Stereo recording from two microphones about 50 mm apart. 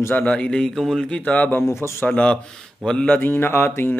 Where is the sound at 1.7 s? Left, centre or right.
Left.